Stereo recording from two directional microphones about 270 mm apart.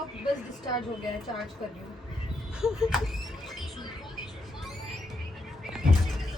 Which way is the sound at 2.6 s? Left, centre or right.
Centre.